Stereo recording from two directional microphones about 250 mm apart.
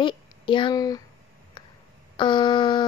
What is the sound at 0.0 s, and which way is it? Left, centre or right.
A woman's voice, centre.